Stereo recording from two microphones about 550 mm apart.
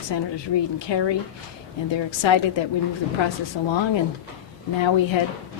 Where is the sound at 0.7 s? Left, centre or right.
Left.